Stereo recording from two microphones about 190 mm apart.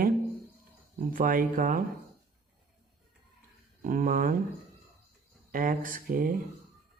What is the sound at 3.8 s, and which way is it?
Speech, 45° right (ahead or behind).